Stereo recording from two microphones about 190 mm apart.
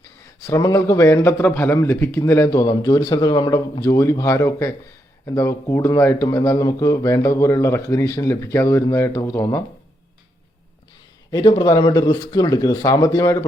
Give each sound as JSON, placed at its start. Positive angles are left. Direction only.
{"t": 0.4, "sound": "speech", "side_deg": 15}
{"t": 11.3, "sound": "speech", "side_deg": 25}